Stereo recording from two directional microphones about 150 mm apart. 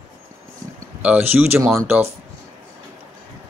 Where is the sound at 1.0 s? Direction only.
10° right (ahead or behind).